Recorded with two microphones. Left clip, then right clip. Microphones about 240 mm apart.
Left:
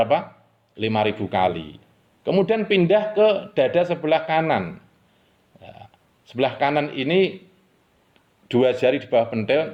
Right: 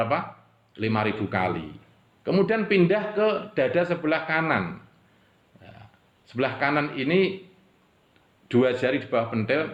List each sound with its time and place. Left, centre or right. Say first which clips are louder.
0.8 s a man's voice: left 4 dB; left
6.2 s a man's voice: left 4 dB; left
8.4 s a man's voice: left 4 dB; left